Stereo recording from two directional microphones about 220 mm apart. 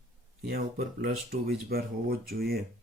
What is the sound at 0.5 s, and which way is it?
Speech, 45° right (ahead or behind).